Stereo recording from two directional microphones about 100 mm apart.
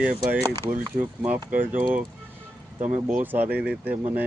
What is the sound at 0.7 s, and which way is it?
Speech, 15° right (ahead or behind).